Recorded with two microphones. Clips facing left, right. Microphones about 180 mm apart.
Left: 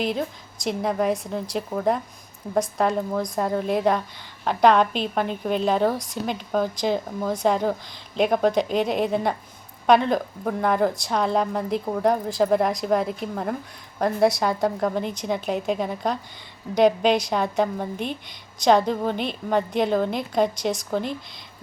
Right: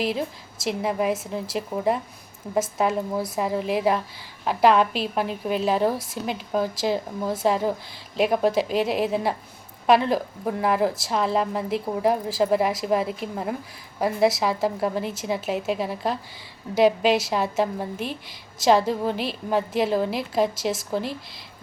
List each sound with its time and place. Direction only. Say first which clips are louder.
0.0 s a woman's voice: even; centre (ahead or behind)